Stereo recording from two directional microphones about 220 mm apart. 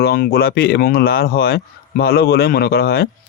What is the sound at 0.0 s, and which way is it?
Speech, 45° left (ahead or behind).